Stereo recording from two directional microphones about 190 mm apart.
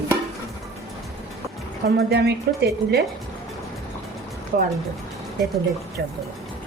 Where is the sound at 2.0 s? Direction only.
60° right (ahead or behind).